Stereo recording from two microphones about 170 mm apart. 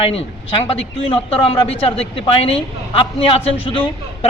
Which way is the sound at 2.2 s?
35° left (ahead or behind).